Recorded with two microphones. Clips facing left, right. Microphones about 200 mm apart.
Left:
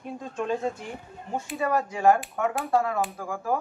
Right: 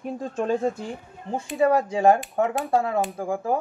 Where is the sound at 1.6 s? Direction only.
30° right (ahead or behind).